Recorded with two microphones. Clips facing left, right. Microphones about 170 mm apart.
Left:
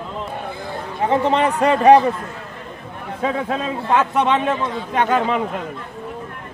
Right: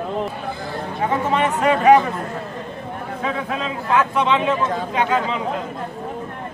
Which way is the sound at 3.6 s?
45° left (ahead or behind).